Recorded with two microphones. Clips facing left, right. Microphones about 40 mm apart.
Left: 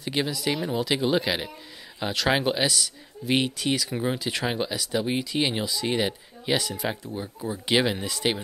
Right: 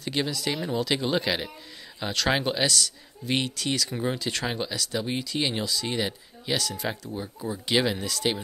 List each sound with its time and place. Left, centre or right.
0.0 s speech: centre